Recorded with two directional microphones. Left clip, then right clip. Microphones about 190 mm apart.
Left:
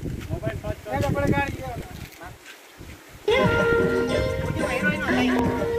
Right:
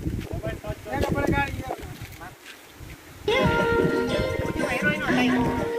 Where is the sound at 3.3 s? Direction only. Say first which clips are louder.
Left 2 dB; 30° right (ahead or behind).